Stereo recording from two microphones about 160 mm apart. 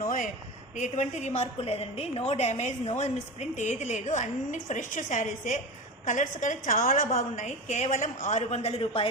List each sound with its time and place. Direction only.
0.8 s a woman's voice: 45° left (ahead or behind)